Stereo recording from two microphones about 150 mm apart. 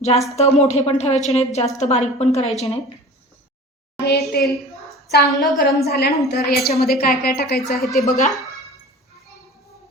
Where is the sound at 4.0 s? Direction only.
90° left.